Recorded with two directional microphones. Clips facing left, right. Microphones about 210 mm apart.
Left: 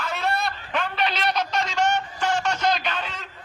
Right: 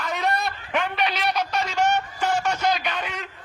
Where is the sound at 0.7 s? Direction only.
10° right (ahead or behind).